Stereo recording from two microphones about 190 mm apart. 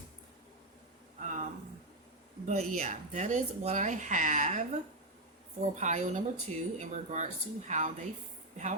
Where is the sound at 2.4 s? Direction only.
40° right (ahead or behind).